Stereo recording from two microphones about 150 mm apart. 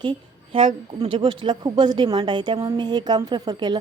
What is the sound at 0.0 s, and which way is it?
A woman's voice, 35° right (ahead or behind).